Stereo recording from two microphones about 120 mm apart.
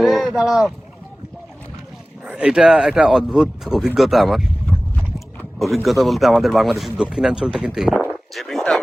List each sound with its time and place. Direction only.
0.0 s speech: centre (ahead or behind)
2.2 s speech: 10° right (ahead or behind)
5.5 s speech: centre (ahead or behind)